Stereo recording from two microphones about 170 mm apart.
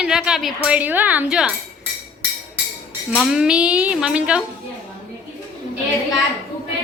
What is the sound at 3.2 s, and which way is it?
Speech, 5° right (ahead or behind).